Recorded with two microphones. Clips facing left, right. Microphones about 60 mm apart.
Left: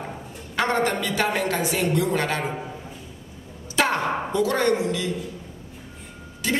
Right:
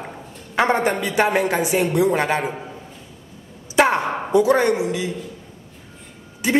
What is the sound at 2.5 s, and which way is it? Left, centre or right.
Speech, centre.